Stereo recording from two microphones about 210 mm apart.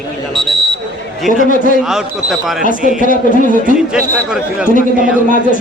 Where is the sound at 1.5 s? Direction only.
40° left (ahead or behind).